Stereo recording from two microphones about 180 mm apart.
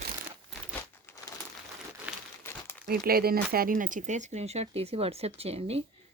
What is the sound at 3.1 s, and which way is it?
Speech, 55° right (ahead or behind).